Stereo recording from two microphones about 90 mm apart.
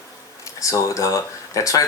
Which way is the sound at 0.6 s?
35° left (ahead or behind).